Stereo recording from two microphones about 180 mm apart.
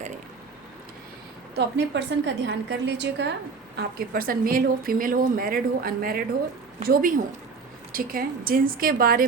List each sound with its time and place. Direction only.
1.5 s a woman's voice: 75° right (ahead or behind)
3.8 s speech: 55° right (ahead or behind)